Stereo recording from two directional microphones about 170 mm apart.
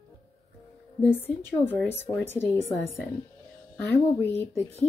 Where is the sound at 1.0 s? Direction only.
10° left (ahead or behind).